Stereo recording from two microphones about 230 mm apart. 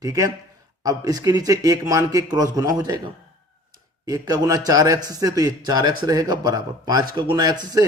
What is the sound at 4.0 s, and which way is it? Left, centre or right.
A man's voice, centre.